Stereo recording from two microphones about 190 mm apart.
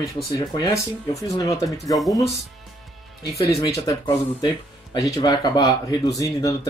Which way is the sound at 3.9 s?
20° left (ahead or behind).